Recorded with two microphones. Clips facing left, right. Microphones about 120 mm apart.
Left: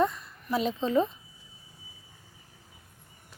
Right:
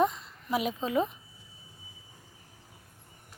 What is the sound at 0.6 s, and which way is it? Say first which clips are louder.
Speech: left 5 dB; 10° right (ahead or behind).